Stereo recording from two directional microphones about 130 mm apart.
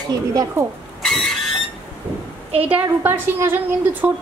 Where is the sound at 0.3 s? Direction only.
25° right (ahead or behind).